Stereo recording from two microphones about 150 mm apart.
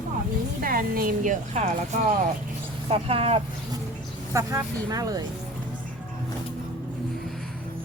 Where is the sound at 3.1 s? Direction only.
40° right (ahead or behind).